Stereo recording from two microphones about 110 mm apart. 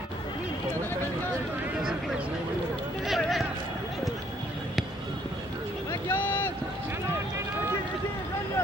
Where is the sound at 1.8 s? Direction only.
5° right (ahead or behind).